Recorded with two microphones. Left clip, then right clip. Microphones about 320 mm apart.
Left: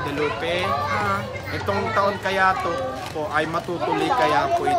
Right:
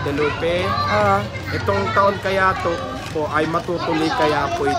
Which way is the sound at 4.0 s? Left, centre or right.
Left.